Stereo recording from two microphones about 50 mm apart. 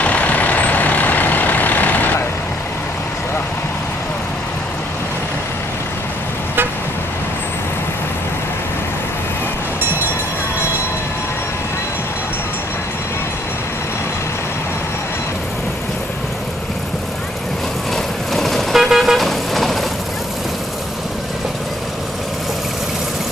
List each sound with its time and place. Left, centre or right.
0.0 s vehicle: left
17.9 s vehicle: centre